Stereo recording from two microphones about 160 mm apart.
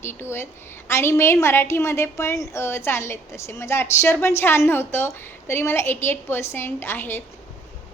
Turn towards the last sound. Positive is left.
turn(degrees=15)  # may be behind; listen again after turning